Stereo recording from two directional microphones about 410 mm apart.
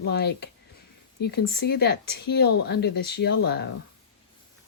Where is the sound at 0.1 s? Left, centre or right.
Left.